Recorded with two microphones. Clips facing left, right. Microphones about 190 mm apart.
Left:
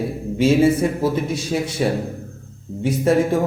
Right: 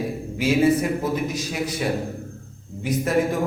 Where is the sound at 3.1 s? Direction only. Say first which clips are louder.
Left 5 dB; 30° left (ahead or behind).